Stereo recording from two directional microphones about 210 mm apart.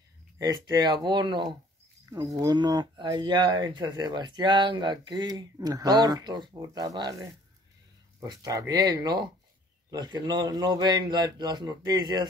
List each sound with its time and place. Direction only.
0.4 s speech: 20° right (ahead or behind)
8.3 s speech: 15° right (ahead or behind)